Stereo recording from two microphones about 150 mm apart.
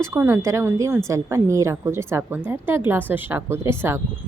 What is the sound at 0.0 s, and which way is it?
A woman's voice, 15° right (ahead or behind).